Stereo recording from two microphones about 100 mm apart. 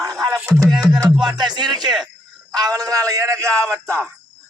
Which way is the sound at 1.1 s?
50° right (ahead or behind).